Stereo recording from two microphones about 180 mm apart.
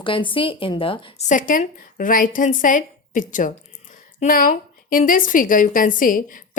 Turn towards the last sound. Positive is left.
turn(degrees=50)  # may be behind; listen again after turning